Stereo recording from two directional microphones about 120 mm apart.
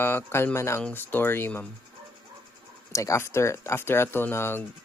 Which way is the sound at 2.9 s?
25° left (ahead or behind).